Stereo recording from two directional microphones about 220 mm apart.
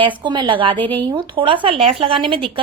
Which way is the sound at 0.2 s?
20° right (ahead or behind).